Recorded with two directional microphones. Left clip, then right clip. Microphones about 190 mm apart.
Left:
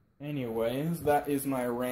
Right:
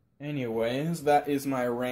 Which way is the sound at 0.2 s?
5° right (ahead or behind).